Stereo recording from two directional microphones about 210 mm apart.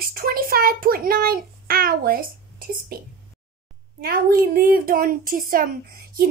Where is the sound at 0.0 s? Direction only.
45° right (ahead or behind).